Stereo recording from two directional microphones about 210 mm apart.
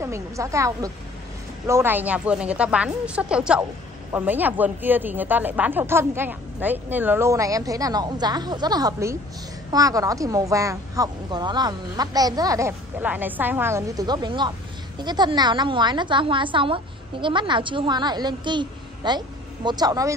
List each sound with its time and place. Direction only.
0.0 s a woman's voice: 15° right (ahead or behind)